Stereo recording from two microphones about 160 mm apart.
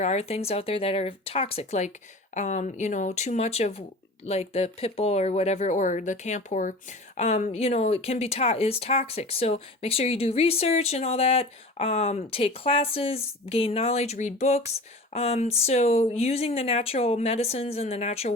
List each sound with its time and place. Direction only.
0.0 s speech: 45° left (ahead or behind)